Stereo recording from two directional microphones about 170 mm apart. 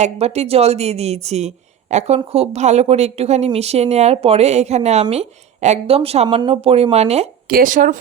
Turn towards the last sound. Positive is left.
turn(degrees=-50)  # may be behind; listen again after turning